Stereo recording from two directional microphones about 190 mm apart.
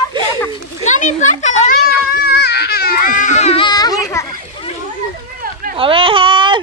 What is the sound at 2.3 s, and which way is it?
Baby cry, 60° left (ahead or behind).